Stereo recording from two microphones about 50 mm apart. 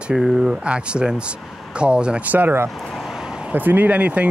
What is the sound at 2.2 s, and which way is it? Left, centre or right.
Speech, right.